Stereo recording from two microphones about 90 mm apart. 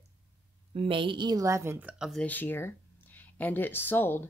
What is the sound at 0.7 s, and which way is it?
Speech, 85° right.